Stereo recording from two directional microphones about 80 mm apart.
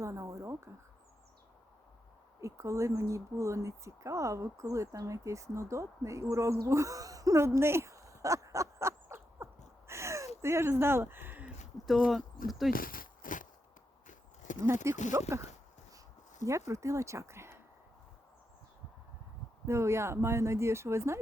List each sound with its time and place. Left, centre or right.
0.0 s speech: right
2.4 s speech: right
11.9 s speech: centre
14.6 s speech: right
16.4 s speech: right
19.6 s speech: right